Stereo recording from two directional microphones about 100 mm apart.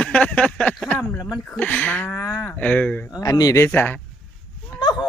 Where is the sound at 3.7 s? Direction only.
20° left (ahead or behind).